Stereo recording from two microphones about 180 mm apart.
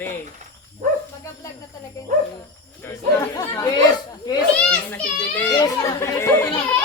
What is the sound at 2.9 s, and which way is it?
Speech, 15° left (ahead or behind).